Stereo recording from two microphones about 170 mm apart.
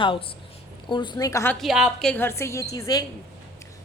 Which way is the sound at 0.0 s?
30° left (ahead or behind).